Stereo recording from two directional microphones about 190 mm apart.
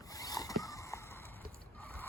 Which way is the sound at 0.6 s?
15° left (ahead or behind).